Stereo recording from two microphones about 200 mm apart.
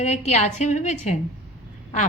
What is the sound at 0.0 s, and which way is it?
A woman's voice, 35° left (ahead or behind).